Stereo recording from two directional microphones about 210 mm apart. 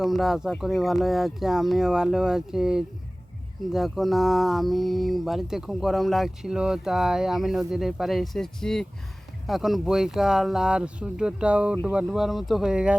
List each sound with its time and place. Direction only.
0.0 s speech: centre (ahead or behind)